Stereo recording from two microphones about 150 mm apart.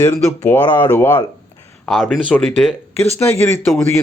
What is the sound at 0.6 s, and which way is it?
Speech, 30° left (ahead or behind).